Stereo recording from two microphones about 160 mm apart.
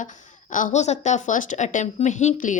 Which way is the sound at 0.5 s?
50° left (ahead or behind).